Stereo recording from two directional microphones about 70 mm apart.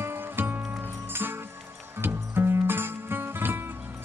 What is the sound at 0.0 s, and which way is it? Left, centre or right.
Music, right.